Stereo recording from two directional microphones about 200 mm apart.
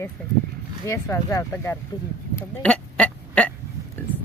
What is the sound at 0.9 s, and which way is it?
Speech, 15° left (ahead or behind).